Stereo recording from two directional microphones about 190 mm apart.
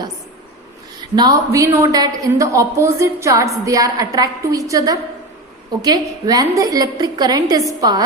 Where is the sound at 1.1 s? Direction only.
20° right (ahead or behind).